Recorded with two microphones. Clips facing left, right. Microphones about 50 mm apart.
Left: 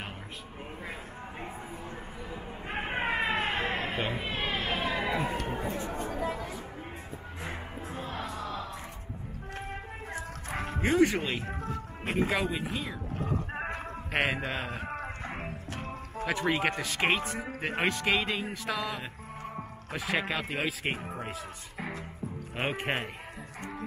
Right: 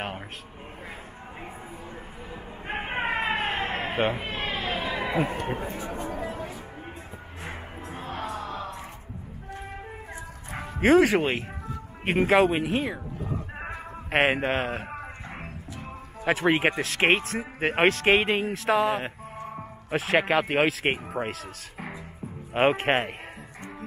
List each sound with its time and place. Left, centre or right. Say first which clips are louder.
2.6 s a sound: right 3 dB; right
4.3 s a sound: right 2 dB; right
5.7 s speech: right 1 dB; right
7.9 s a sound: right 4 dB; right
10.8 s speech: right 7 dB; right
14.1 s speech: right 7 dB; right
15.2 s music: left 2 dB; centre
15.7 s music: left 1 dB; left
16.4 s speech: right 6 dB; right
16.8 s speech: right 5 dB; right
22.5 s speech: right 10 dB; right